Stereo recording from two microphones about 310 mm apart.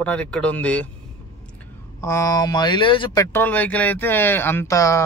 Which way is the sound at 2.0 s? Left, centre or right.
Centre.